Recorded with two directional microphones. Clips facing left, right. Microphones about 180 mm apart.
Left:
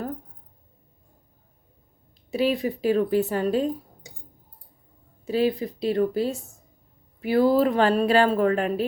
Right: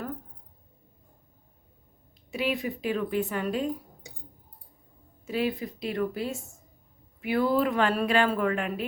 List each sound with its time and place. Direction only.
2.3 s speech: 35° left (ahead or behind)
5.2 s speech: 35° left (ahead or behind)
6.3 s speech: centre (ahead or behind)
7.2 s speech: 35° left (ahead or behind)